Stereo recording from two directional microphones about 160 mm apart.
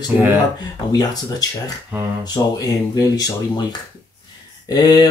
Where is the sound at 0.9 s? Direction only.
25° left (ahead or behind).